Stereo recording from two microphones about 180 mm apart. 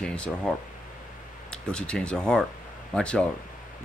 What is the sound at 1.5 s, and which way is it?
Speech, 5° left (ahead or behind).